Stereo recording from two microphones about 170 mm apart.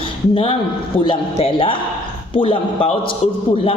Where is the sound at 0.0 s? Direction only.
30° left (ahead or behind).